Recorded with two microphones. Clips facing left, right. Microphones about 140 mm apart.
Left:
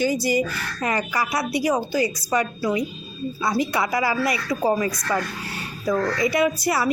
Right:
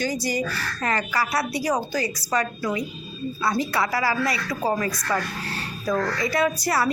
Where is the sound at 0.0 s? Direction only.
10° left (ahead or behind).